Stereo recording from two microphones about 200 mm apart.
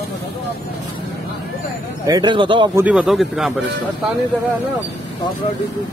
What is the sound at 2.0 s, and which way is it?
Speech, 20° right (ahead or behind).